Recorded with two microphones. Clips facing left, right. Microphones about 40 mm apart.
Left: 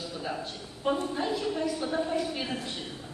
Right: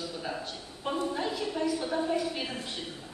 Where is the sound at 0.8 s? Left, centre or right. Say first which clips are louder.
Left 2 dB; centre.